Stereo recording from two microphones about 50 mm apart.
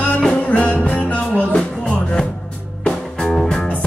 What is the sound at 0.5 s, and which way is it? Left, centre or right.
Music, left.